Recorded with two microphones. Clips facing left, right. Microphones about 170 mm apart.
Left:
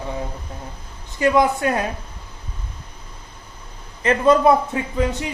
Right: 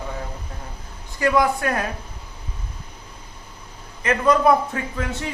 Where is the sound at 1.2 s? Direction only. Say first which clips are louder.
Left 2 dB; 20° left (ahead or behind).